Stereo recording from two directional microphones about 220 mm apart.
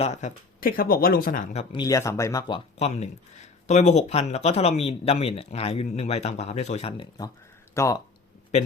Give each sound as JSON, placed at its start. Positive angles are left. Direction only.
{"t": 0.0, "sound": "speech", "side_deg": 30}
{"t": 1.7, "sound": "speech", "side_deg": 15}
{"t": 2.7, "sound": "speech", "side_deg": 30}